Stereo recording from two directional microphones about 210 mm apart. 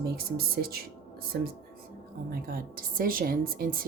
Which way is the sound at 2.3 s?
45° right (ahead or behind).